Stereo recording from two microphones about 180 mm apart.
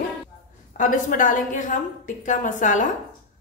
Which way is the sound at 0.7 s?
45° left (ahead or behind).